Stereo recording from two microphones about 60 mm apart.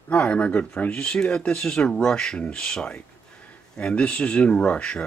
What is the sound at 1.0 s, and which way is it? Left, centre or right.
Speech, centre.